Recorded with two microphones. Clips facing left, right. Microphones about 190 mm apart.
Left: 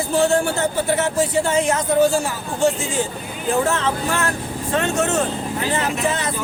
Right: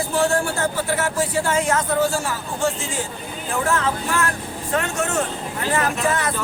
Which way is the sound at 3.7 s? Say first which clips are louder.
Left 1 dB; 25° left (ahead or behind).